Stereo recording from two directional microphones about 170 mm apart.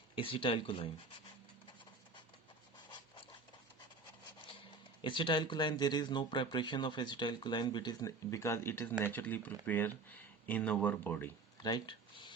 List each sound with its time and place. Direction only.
0.2 s speech: 30° left (ahead or behind)
2.7 s a sound: 25° left (ahead or behind)
5.0 s speech: 30° left (ahead or behind); by 11.3 s 10° left (ahead or behind)
11.6 s speech: 25° left (ahead or behind)